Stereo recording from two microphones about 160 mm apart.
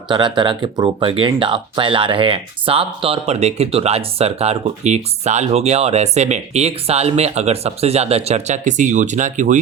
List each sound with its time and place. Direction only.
0.1 s speech: 30° right (ahead or behind); by 9.6 s 50° right (ahead or behind)